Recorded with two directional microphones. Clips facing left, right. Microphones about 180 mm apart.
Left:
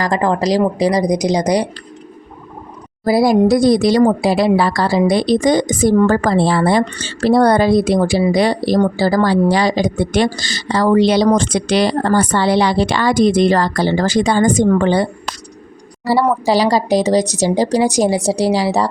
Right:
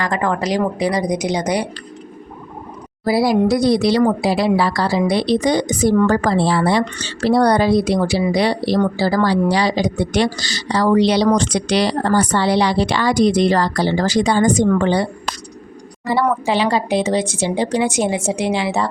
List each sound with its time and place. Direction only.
0.0 s speech: 35° left (ahead or behind)
3.0 s a woman's voice: 45° left (ahead or behind)
16.0 s speech: 35° left (ahead or behind)